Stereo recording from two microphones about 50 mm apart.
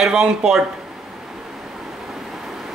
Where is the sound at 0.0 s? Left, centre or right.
Centre.